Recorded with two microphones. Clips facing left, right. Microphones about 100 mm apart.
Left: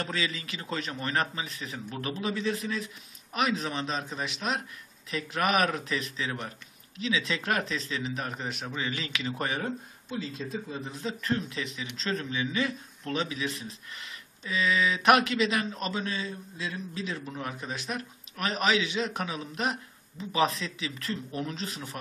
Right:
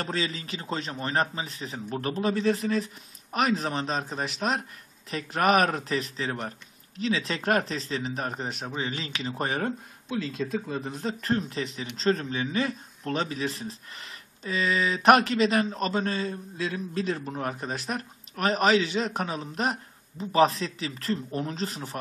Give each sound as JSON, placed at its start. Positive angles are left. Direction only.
{"t": 0.0, "sound": "a man's voice", "side_deg": -35}
{"t": 10.0, "sound": "speech", "side_deg": -70}
{"t": 10.9, "sound": "a man's voice", "side_deg": -45}